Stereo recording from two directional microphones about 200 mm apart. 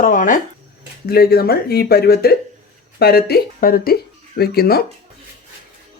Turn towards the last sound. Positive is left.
turn(degrees=50)  # may be behind; listen again after turning